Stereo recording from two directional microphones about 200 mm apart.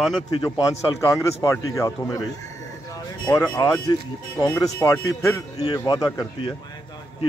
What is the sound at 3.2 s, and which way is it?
A man's voice, 15° left (ahead or behind).